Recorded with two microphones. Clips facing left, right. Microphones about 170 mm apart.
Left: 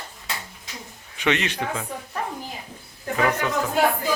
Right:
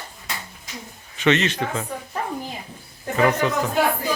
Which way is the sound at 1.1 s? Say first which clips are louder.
Right 4 dB; 10° left (ahead or behind).